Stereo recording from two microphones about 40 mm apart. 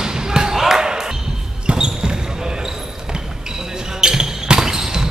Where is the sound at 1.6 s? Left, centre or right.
Centre.